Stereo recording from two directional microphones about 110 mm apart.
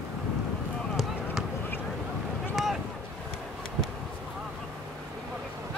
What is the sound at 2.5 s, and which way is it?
Boat, centre (ahead or behind).